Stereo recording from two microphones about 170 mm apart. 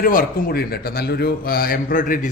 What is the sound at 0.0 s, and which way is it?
A man's voice, 55° left (ahead or behind).